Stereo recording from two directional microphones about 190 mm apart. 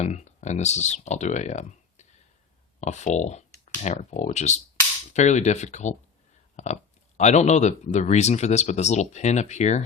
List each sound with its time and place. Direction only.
0.0 s speech: 35° left (ahead or behind)